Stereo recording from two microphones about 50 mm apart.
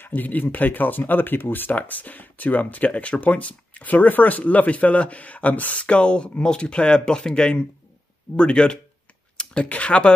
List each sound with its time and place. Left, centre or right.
0.0 s speech: left; by 8.7 s centre
9.4 s a sound: centre
9.7 s speech: left